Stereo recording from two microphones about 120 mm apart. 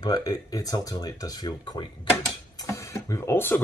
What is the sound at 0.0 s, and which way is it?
Speech, 30° left (ahead or behind).